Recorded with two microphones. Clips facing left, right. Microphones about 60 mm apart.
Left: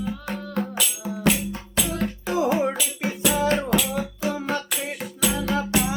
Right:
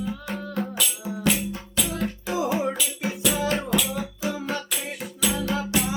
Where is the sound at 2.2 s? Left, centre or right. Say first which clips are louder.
Left 4 dB; left.